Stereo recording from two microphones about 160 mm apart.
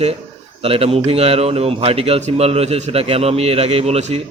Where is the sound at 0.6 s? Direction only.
40° right (ahead or behind).